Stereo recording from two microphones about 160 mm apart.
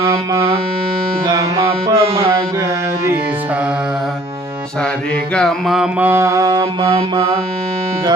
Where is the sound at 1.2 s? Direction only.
20° right (ahead or behind).